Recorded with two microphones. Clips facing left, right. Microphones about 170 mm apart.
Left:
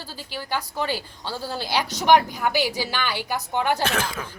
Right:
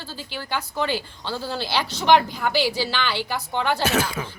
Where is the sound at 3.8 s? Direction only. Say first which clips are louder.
Right 3 dB; 5° right (ahead or behind).